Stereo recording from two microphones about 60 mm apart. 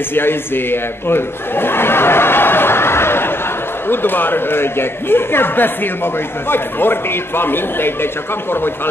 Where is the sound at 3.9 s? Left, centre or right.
Left.